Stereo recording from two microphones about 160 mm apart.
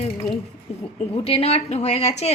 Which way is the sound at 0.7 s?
40° left (ahead or behind).